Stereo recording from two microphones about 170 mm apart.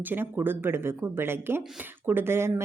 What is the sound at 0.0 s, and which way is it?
A woman's voice, 10° right (ahead or behind).